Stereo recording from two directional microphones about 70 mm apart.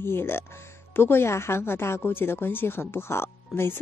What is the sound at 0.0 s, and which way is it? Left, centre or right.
Speech, left.